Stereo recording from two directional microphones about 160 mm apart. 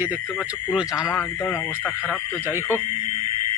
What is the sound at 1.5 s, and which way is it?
Speech, 15° left (ahead or behind).